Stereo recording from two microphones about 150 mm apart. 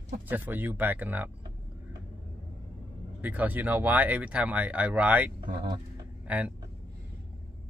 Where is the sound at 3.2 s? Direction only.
10° right (ahead or behind).